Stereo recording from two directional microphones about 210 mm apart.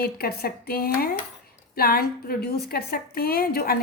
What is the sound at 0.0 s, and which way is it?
A woman's voice, 45° left (ahead or behind).